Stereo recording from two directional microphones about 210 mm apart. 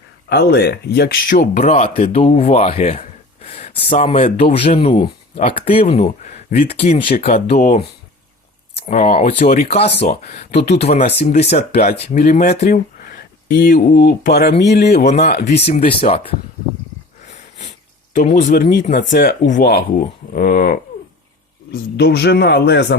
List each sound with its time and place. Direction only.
0.3 s speech: 50° left (ahead or behind)
8.9 s speech: 40° left (ahead or behind)
9.6 s a man's voice: 30° left (ahead or behind); by 15.0 s 50° left (ahead or behind)
15.0 s speech: 30° left (ahead or behind)
18.1 s a man's voice: 40° left (ahead or behind)